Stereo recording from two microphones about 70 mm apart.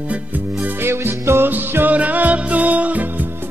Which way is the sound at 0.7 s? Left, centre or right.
Right.